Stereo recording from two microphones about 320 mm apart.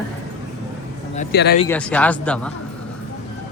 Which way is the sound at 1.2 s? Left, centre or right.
Left.